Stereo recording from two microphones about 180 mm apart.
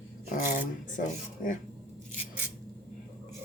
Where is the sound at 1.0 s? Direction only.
50° left (ahead or behind).